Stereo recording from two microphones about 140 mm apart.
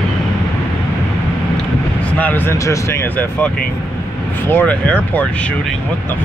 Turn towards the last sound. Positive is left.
turn(degrees=10)  # may be behind; listen again after turning